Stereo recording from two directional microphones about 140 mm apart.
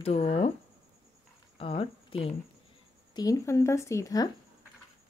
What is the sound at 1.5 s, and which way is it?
Speech, 40° left (ahead or behind).